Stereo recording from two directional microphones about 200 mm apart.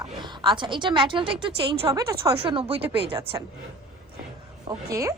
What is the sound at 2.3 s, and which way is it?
Speech, 25° right (ahead or behind).